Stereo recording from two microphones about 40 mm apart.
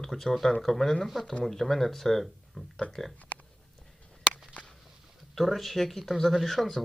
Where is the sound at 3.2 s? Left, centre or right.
Left.